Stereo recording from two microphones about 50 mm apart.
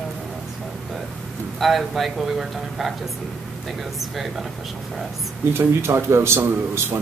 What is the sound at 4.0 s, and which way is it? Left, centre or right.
Speech, centre.